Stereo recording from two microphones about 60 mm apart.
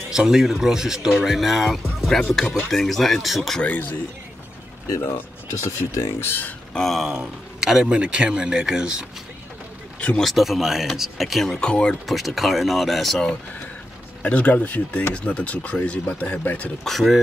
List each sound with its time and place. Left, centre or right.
0.1 s speech: centre
3.6 s speech: left
5.5 s speech: left
6.2 s speech: left
6.7 s speech: centre
7.1 s a man's voice: centre
9.9 s speech: centre
10.2 s speech: centre
11.6 s speech: centre
12.1 s speech: centre
14.2 s speech: left
16.8 s speech: centre